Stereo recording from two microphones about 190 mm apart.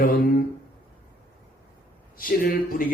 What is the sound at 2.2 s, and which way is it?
Speech, 50° left (ahead or behind).